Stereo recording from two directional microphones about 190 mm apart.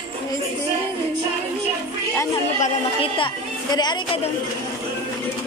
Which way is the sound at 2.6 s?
30° left (ahead or behind).